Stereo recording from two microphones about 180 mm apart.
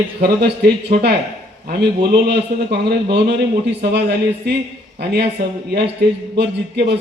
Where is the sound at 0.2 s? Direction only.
65° right (ahead or behind).